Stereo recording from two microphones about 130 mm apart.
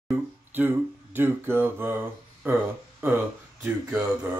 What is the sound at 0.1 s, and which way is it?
Speech, 15° right (ahead or behind).